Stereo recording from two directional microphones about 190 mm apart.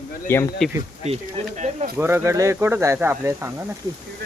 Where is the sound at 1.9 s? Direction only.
10° right (ahead or behind).